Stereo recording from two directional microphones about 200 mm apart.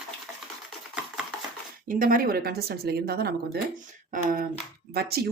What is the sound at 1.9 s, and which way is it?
Speech, 45° right (ahead or behind).